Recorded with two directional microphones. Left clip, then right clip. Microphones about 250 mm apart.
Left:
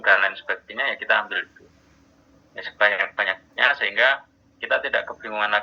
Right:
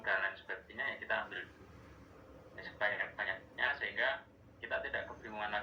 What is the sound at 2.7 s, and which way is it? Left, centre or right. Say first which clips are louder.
Speech: left 16 dB; left.